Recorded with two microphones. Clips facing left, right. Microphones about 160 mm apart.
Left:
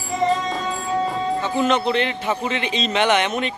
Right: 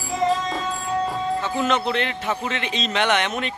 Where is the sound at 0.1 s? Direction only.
Centre (ahead or behind).